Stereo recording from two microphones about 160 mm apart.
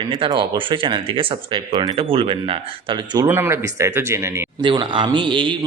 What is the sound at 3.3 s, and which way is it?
Speech, 15° right (ahead or behind).